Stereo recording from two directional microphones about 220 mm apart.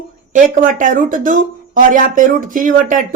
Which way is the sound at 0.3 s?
35° right (ahead or behind).